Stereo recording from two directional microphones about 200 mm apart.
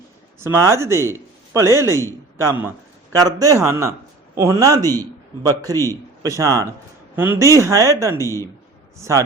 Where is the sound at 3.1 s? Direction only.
15° right (ahead or behind).